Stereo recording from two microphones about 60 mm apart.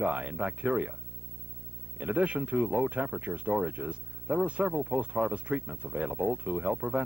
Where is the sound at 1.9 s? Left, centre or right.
Right.